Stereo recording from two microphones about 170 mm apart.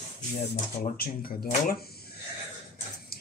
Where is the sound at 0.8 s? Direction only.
60° left (ahead or behind).